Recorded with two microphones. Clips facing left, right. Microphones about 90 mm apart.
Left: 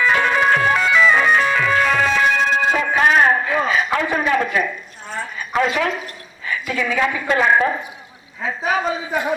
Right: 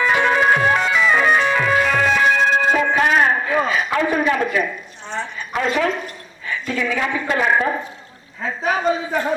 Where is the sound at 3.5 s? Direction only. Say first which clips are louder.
Even; centre (ahead or behind).